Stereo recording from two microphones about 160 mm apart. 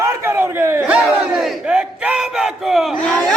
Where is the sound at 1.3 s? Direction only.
5° right (ahead or behind).